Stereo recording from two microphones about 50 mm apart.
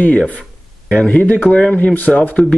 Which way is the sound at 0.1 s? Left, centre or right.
Left.